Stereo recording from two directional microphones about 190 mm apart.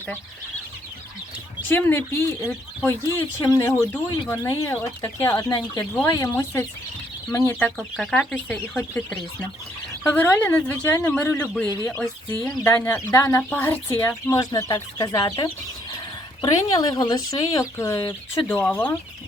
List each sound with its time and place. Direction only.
1.6 s speech: 10° left (ahead or behind)
7.8 s speech: centre (ahead or behind)